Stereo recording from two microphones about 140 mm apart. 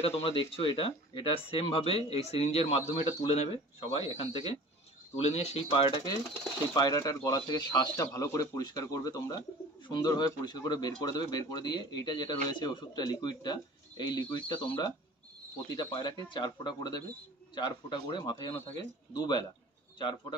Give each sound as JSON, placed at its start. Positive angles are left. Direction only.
{"t": 0.0, "sound": "speech", "side_deg": 45}
{"t": 5.7, "sound": "speech", "side_deg": 35}
{"t": 15.7, "sound": "speech", "side_deg": 30}